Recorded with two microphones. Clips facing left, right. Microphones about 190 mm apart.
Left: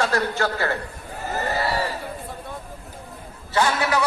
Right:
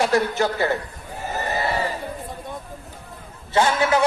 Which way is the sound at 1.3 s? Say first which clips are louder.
Even; 20° right (ahead or behind).